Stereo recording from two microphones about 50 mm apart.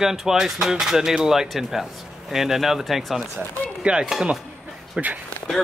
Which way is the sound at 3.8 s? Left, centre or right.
Centre.